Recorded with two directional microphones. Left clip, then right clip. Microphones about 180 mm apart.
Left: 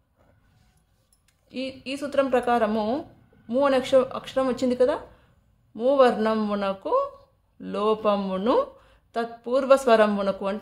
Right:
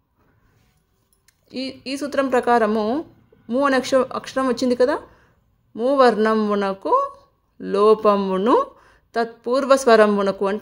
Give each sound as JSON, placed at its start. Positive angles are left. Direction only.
{"t": 1.2, "sound": "speech", "side_deg": -35}